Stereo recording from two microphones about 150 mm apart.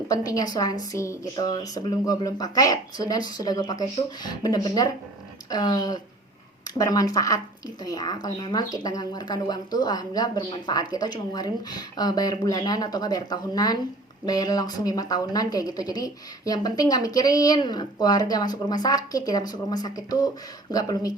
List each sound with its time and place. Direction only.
0.1 s a woman's voice: 25° left (ahead or behind)